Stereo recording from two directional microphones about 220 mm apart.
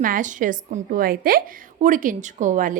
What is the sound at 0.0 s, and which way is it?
A woman's voice, 35° right (ahead or behind).